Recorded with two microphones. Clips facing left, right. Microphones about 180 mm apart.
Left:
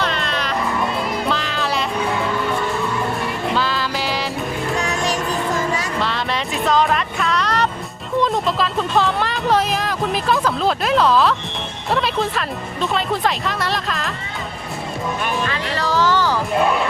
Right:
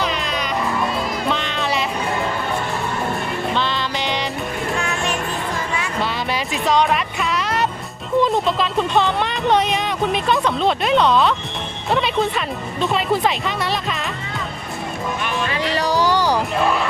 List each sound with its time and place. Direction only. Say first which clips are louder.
0.0 s music: even; centre (ahead or behind)
3.5 s music: left 2 dB; 5° left (ahead or behind)
4.8 s music: left 2 dB; 35° left (ahead or behind)
6.0 s music: even; centre (ahead or behind)
15.4 s music: right 2 dB; 15° right (ahead or behind)